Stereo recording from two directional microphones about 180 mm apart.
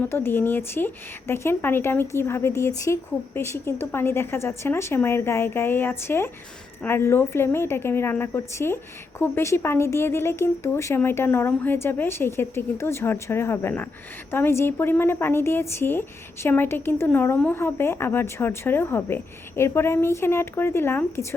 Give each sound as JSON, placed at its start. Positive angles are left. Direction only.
{"t": 0.0, "sound": "a woman's voice", "side_deg": 10}